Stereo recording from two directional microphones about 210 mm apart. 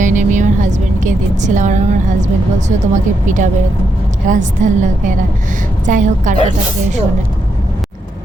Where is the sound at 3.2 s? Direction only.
35° right (ahead or behind).